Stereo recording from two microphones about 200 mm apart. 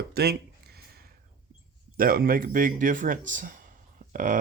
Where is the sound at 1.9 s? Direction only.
45° right (ahead or behind).